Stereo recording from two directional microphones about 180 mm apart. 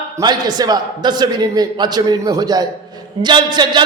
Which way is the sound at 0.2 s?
20° right (ahead or behind).